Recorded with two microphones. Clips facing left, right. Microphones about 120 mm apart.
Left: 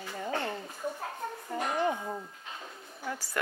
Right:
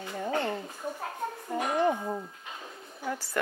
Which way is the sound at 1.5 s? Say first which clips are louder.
Right 3 dB; 5° right (ahead or behind).